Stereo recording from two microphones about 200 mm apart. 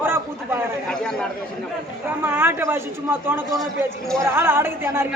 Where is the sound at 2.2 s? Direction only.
10° right (ahead or behind).